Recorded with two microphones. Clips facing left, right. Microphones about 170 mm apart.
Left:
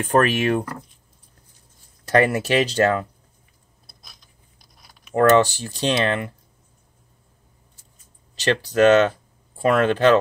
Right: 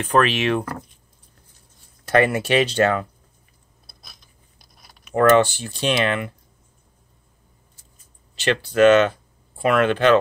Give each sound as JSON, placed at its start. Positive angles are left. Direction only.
{"t": 0.0, "sound": "speech", "side_deg": 45}
{"t": 2.0, "sound": "speech", "side_deg": 35}
{"t": 5.1, "sound": "speech", "side_deg": 35}
{"t": 8.4, "sound": "speech", "side_deg": 40}